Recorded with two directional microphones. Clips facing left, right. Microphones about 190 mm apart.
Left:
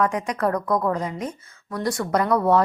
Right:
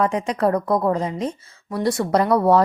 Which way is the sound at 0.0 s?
25° right (ahead or behind).